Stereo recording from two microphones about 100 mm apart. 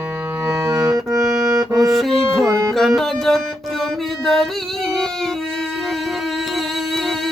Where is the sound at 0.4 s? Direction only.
30° right (ahead or behind).